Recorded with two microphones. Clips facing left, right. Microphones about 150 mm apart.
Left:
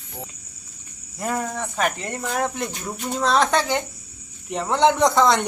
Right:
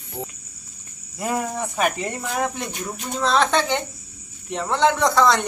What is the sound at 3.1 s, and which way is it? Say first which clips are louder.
Speech: even; 10° left (ahead or behind).